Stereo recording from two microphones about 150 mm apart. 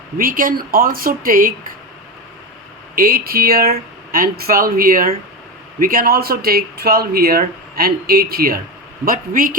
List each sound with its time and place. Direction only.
0.2 s speech: 70° right (ahead or behind)
2.9 s speech: 75° right (ahead or behind)
9.0 s speech: 70° right (ahead or behind)